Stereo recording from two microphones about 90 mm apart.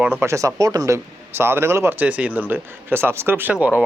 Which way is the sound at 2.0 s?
20° right (ahead or behind).